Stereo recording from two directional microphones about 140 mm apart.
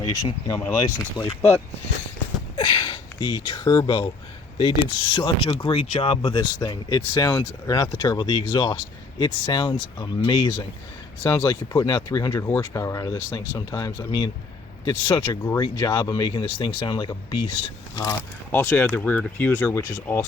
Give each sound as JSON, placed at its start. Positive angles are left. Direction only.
{"t": 0.0, "sound": "speech", "side_deg": 30}
{"t": 1.4, "sound": "speech", "side_deg": 15}
{"t": 2.6, "sound": "speech", "side_deg": 30}
{"t": 18.5, "sound": "speech", "side_deg": 10}